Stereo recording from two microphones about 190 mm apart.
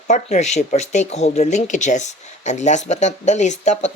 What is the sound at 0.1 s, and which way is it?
Speech, 35° left (ahead or behind).